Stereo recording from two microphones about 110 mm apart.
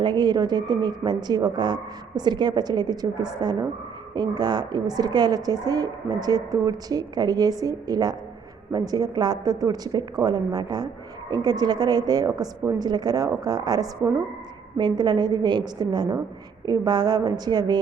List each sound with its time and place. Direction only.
0.0 s a woman's voice: 40° right (ahead or behind)